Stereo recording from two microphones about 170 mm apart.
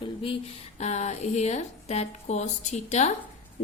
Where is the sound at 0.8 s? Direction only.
40° left (ahead or behind).